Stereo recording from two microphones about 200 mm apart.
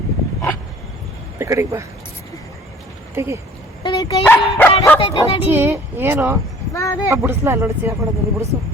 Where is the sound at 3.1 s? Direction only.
15° right (ahead or behind).